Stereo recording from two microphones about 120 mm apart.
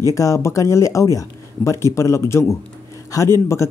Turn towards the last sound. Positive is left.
turn(degrees=20)  # may be behind; listen again after turning